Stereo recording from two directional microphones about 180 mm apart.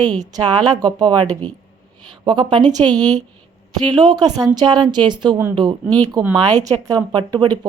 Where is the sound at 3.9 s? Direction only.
25° right (ahead or behind).